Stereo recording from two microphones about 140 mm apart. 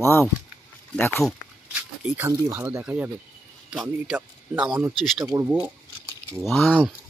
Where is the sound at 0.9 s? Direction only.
15° left (ahead or behind).